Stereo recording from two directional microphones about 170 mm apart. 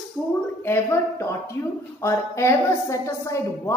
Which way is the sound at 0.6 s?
15° left (ahead or behind).